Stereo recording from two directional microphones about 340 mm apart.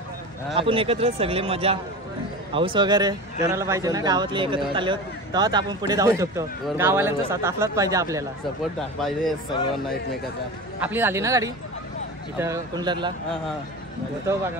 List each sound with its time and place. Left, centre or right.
0.6 s speech: centre
10.8 s speech: centre